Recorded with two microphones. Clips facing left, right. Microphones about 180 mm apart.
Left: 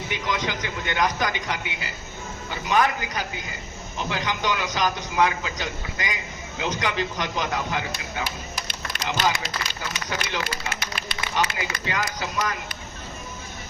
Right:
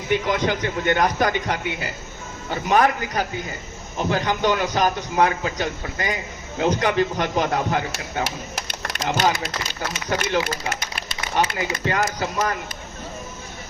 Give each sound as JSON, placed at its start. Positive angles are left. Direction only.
{"t": 0.1, "sound": "a man's voice", "side_deg": -55}
{"t": 8.2, "sound": "a sound", "side_deg": -80}
{"t": 9.0, "sound": "a man's voice", "side_deg": -45}